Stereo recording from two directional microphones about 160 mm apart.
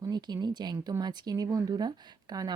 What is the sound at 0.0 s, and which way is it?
A woman's voice, 25° right (ahead or behind).